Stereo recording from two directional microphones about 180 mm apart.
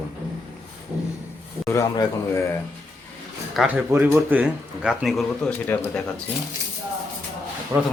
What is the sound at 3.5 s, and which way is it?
Speech, 10° right (ahead or behind).